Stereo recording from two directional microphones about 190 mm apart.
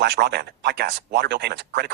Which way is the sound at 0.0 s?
60° right (ahead or behind).